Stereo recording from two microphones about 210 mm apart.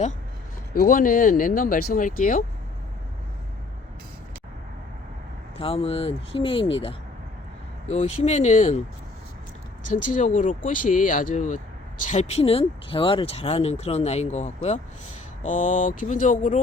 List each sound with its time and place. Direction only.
0.7 s speech: 45° left (ahead or behind)
5.5 s speech: 25° left (ahead or behind)
10.1 s speech: 35° left (ahead or behind)